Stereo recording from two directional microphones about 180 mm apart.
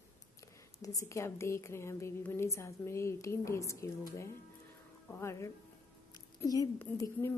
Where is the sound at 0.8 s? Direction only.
15° left (ahead or behind).